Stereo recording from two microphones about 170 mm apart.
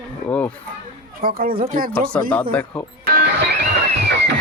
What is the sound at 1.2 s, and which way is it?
Speech, 60° right (ahead or behind).